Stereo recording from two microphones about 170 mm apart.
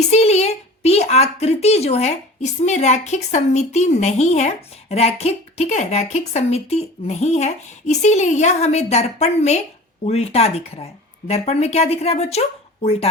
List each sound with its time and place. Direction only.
0.0 s speech: 40° left (ahead or behind)